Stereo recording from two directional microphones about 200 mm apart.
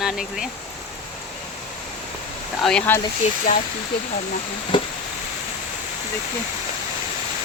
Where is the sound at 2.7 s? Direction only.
5° left (ahead or behind).